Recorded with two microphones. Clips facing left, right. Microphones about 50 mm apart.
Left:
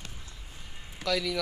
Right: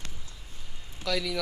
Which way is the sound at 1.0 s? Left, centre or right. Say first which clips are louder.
Left 1 dB; centre.